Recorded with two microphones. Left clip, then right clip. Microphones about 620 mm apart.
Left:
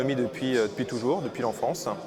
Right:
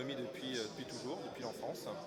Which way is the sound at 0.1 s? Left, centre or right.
Left.